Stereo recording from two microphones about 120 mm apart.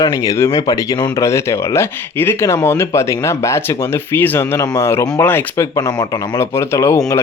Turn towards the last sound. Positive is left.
turn(degrees=25)  # may be behind; listen again after turning